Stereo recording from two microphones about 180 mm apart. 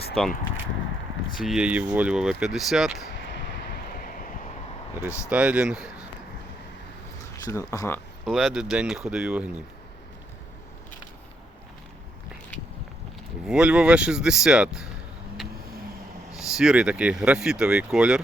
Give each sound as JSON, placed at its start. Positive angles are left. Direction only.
{"t": 0.1, "sound": "speech", "side_deg": 0}
{"t": 1.4, "sound": "speech", "side_deg": -5}
{"t": 3.2, "sound": "a sound", "side_deg": 75}
{"t": 3.9, "sound": "vehicle", "side_deg": 50}
{"t": 5.3, "sound": "speech", "side_deg": -5}
{"t": 7.4, "sound": "speech", "side_deg": 20}
{"t": 8.2, "sound": "speech", "side_deg": 0}
{"t": 13.5, "sound": "speech", "side_deg": -5}
{"t": 16.4, "sound": "speech", "side_deg": -5}